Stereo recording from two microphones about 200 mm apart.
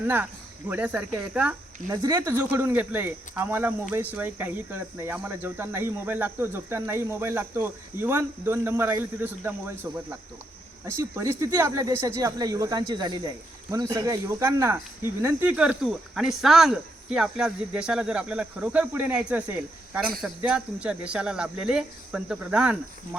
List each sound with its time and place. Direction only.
0.7 s speech: 10° right (ahead or behind)
1.9 s speech: 20° right (ahead or behind)
2.3 s speech: 10° right (ahead or behind)
10.8 s speech: 15° right (ahead or behind)